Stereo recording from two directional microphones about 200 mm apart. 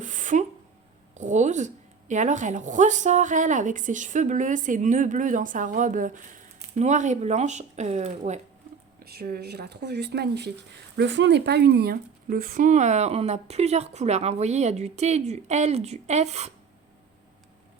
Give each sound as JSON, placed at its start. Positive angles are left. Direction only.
{"t": 0.0, "sound": "a sound", "side_deg": -40}
{"t": 1.2, "sound": "speech", "side_deg": -35}
{"t": 9.0, "sound": "speech", "side_deg": -50}